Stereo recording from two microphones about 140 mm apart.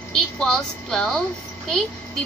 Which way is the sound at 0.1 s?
5° left (ahead or behind).